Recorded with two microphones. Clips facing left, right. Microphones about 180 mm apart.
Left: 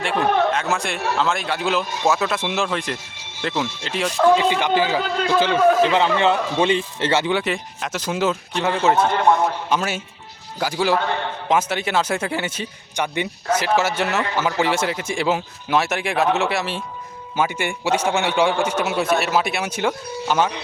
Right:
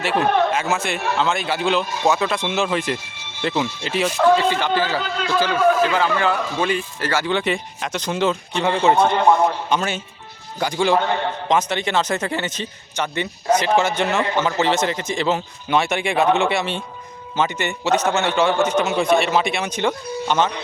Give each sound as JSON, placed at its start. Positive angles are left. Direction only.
{"t": 0.0, "sound": "a man's voice", "side_deg": -5}
{"t": 4.4, "sound": "a man's voice", "side_deg": 15}
{"t": 7.3, "sound": "a man's voice", "side_deg": 5}